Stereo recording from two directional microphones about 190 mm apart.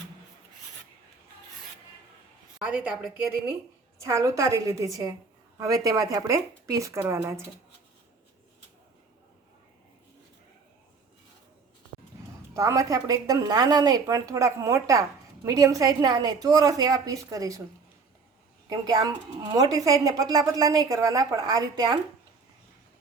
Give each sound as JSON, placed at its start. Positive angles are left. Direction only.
{"t": 2.6, "sound": "a woman's voice", "side_deg": -5}
{"t": 3.9, "sound": "speech", "side_deg": -15}
{"t": 12.5, "sound": "a woman's voice", "side_deg": -15}
{"t": 18.7, "sound": "a woman's voice", "side_deg": -20}